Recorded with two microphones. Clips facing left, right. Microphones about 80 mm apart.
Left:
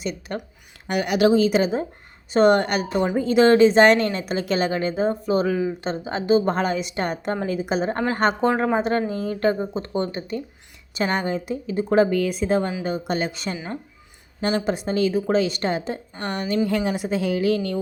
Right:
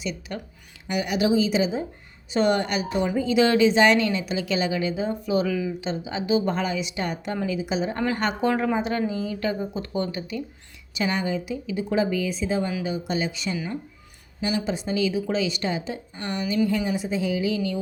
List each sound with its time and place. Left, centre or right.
0.0 s a woman's voice: left
0.9 s a woman's voice: left
14.6 s a woman's voice: left
16.6 s speech: left